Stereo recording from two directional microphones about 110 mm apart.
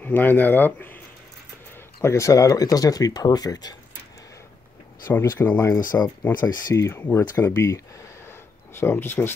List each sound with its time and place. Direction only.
0.0 s speech: 20° left (ahead or behind)
2.0 s speech: 25° left (ahead or behind)
5.0 s speech: 20° left (ahead or behind)
5.9 s speech: 35° left (ahead or behind)